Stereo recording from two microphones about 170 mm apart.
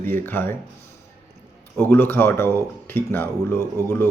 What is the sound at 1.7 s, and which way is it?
Speech, 15° left (ahead or behind).